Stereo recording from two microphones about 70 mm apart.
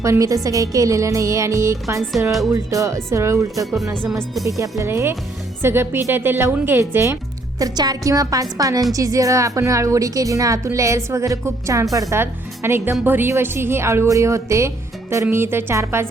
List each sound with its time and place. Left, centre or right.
0.0 s a woman's voice: right
4.8 s a woman's voice: right
7.6 s a woman's voice: right
12.1 s a woman's voice: right